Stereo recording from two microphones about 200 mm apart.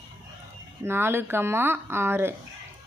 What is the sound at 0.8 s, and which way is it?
Speech, 10° right (ahead or behind).